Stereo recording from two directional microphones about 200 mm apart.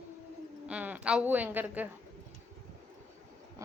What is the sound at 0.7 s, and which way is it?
A woman's voice, 5° right (ahead or behind).